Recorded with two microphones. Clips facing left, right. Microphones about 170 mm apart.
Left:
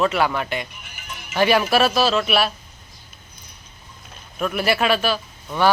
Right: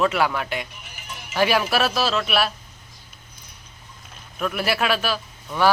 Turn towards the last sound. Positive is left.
turn(degrees=0)  # may be behind; listen again after turning